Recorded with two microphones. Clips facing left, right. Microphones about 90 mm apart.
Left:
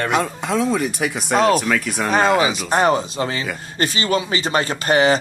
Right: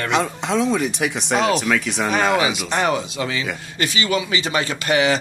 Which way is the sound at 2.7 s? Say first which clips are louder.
Left 4 dB; 35° left (ahead or behind).